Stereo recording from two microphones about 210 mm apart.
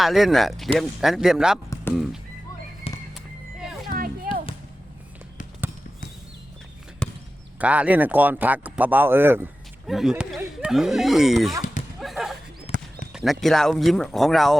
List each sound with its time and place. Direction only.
0.0 s speech: centre (ahead or behind)
2.9 s music: 25° left (ahead or behind)
3.8 s a sound: 45° right (ahead or behind)
7.0 s basketball bounce: 5° left (ahead or behind)
7.6 s speech: 5° right (ahead or behind)
11.6 s a sound: 35° left (ahead or behind)
11.9 s a sound: centre (ahead or behind)
12.7 s clip-clop: 30° left (ahead or behind)
13.4 s speech: centre (ahead or behind)